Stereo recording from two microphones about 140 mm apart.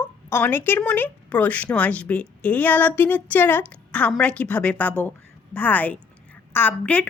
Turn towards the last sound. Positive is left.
turn(degrees=10)  # may be behind; listen again after turning